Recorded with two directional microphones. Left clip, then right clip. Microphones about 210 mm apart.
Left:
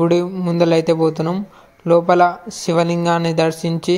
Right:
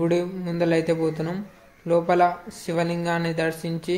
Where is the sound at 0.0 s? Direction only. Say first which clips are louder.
Left 7 dB; 30° left (ahead or behind).